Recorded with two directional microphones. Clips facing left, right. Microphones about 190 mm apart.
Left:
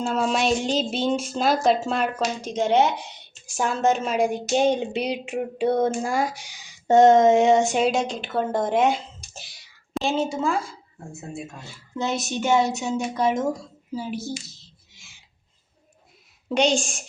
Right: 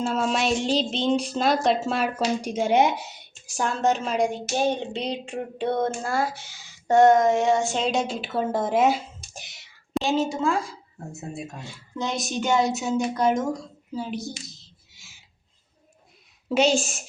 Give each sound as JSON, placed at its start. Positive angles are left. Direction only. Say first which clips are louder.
{"t": 0.0, "sound": "a woman's voice", "louder": "left 1 dB", "side_deg": 0}
{"t": 7.9, "sound": "a woman's voice", "louder": "left 2 dB", "side_deg": 0}
{"t": 9.4, "sound": "whispering", "louder": "even", "side_deg": -20}
{"t": 9.9, "sound": "a woman's voice", "louder": "right 1 dB", "side_deg": 0}
{"t": 11.6, "sound": "a woman's voice", "louder": "left 3 dB", "side_deg": 5}
{"t": 14.6, "sound": "a sound", "louder": "left 1 dB", "side_deg": 0}
{"t": 16.5, "sound": "a woman's voice", "louder": "even", "side_deg": -5}